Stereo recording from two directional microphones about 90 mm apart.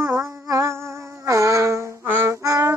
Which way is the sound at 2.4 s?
40° right (ahead or behind).